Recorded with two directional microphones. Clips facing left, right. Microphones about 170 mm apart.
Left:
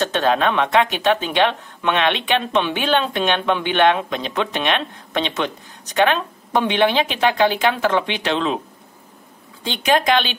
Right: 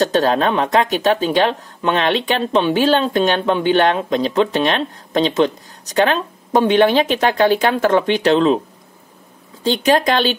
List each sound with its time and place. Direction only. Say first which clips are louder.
0.0 s speech: right 3 dB; 35° right (ahead or behind)
9.6 s speech: right 4 dB; 40° right (ahead or behind)